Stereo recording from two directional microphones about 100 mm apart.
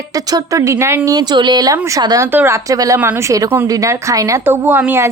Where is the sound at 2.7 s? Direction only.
35° right (ahead or behind).